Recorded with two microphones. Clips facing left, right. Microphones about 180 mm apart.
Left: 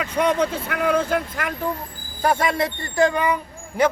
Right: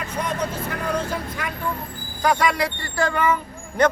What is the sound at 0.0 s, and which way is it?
Speech, 70° left (ahead or behind).